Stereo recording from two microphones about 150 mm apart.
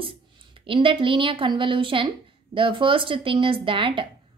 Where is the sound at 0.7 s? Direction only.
35° right (ahead or behind).